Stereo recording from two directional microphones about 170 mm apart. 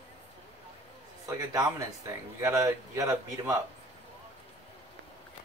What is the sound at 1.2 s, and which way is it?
Speech, 20° right (ahead or behind).